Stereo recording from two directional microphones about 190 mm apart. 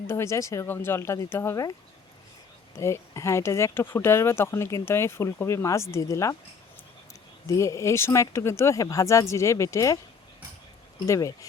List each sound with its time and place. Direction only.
0.1 s speech: 15° left (ahead or behind)
2.7 s speech: 15° left (ahead or behind)
7.4 s speech: 15° left (ahead or behind)
11.0 s speech: 15° left (ahead or behind)